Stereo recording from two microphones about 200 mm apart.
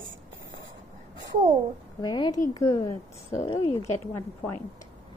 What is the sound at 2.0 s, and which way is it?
Speech, 20° left (ahead or behind).